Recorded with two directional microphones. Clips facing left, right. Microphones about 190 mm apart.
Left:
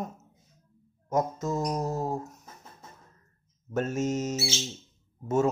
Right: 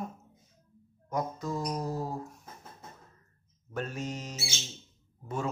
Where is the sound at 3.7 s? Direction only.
45° left (ahead or behind).